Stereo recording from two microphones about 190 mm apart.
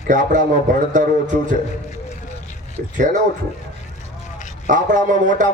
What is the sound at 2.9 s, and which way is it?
Music, 40° right (ahead or behind).